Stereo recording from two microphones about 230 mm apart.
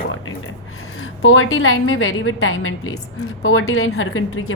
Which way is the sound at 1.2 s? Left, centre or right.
Left.